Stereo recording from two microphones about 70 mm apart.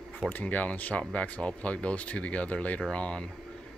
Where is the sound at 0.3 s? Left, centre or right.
Left.